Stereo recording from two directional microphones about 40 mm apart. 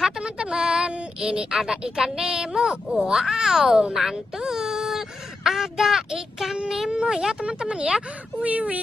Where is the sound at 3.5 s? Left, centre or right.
Centre.